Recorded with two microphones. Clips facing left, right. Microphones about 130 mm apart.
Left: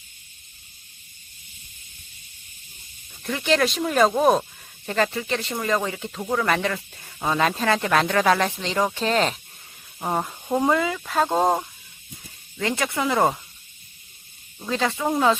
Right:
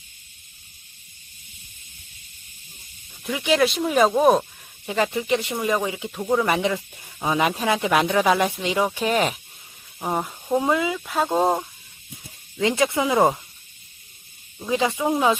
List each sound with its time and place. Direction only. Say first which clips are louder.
3.2 s speech: right 1 dB; 10° right (ahead or behind)
12.5 s speech: right 4 dB; 20° right (ahead or behind)
14.7 s speech: right 2 dB; 15° right (ahead or behind)